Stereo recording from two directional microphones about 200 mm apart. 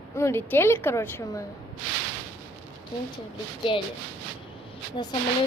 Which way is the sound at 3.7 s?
25° left (ahead or behind).